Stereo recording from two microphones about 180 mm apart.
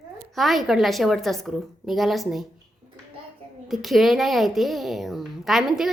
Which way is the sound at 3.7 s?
Centre (ahead or behind).